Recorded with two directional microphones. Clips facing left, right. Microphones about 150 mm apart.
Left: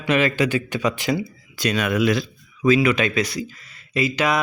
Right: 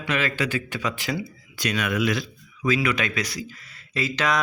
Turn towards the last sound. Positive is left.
turn(degrees=10)  # may be behind; listen again after turning